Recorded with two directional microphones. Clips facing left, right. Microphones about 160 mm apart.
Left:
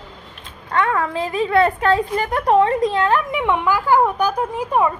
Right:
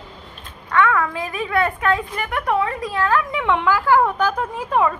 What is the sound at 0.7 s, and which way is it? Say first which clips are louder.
A woman's voice: right 1 dB; 35° left (ahead or behind).